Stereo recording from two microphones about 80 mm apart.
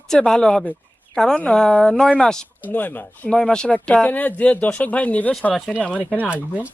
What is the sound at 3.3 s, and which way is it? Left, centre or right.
Speech, centre.